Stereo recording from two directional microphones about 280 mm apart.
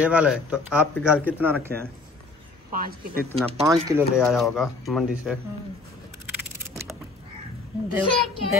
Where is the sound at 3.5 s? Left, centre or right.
Centre.